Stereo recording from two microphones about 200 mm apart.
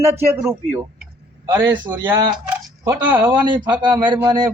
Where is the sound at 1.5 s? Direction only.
20° right (ahead or behind).